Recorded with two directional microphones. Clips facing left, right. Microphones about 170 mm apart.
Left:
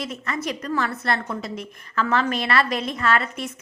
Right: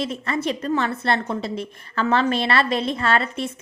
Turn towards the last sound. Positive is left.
turn(degrees=-30)  # may be behind; listen again after turning